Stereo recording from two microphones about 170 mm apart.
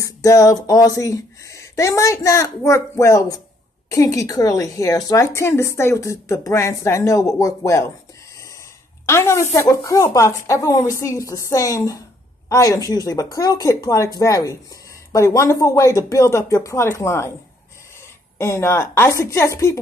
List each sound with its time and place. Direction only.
0.0 s a woman's voice: 20° left (ahead or behind)
9.0 s a woman's voice: 15° left (ahead or behind)
18.4 s a woman's voice: 15° left (ahead or behind)